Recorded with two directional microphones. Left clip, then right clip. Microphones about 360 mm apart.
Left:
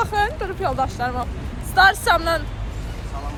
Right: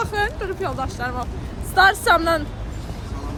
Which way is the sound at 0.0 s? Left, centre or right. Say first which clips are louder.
Left 2 dB; centre.